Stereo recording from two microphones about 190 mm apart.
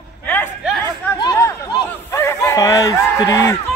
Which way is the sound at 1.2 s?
20° left (ahead or behind).